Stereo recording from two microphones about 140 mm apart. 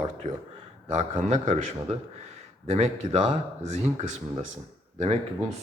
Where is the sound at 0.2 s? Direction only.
55° right (ahead or behind).